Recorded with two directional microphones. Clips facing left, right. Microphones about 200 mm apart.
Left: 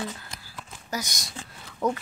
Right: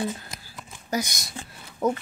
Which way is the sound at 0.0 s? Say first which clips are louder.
Right 5 dB; 25° right (ahead or behind).